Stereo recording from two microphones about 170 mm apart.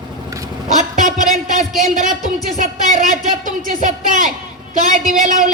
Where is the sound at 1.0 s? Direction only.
50° right (ahead or behind).